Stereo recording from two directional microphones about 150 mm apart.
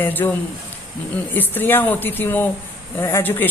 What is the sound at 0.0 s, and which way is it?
A woman's voice, 10° left (ahead or behind).